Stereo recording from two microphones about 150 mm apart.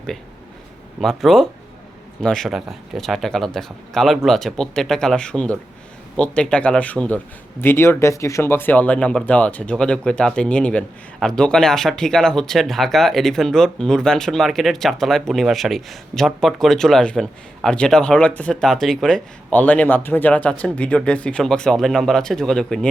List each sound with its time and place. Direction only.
1.0 s speech: centre (ahead or behind)